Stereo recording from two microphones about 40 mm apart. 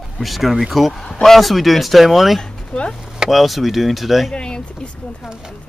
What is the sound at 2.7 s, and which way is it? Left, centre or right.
Chopping, left.